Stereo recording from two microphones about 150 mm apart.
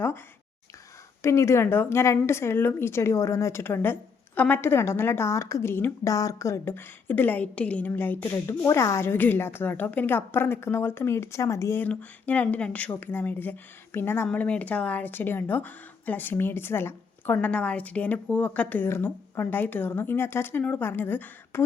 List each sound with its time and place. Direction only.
1.2 s a woman's voice: 20° left (ahead or behind)